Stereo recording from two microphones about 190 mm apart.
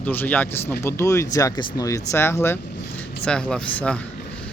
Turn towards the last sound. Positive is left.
turn(degrees=5)  # may be behind; listen again after turning